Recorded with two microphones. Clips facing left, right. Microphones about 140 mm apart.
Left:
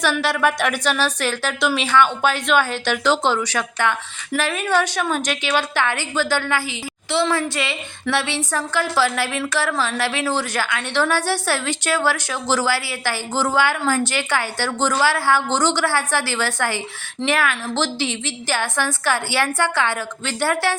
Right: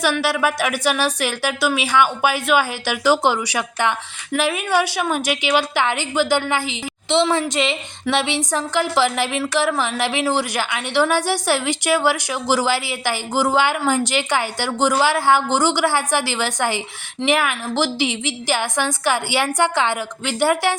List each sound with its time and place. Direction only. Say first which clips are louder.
0.0 s a woman's voice: even; 10° right (ahead or behind)